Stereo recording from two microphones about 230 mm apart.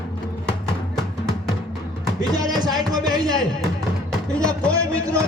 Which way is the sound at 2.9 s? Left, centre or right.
Centre.